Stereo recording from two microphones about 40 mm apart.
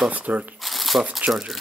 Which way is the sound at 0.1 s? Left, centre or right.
Right.